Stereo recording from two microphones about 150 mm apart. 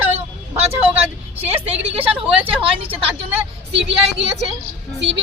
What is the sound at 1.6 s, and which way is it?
Speech, 40° right (ahead or behind).